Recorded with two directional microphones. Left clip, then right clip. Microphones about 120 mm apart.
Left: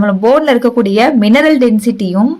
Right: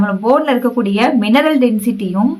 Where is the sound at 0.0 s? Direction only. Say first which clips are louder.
Left 4 dB; 45° left (ahead or behind).